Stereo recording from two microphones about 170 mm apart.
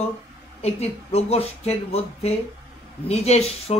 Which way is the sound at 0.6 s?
40° left (ahead or behind).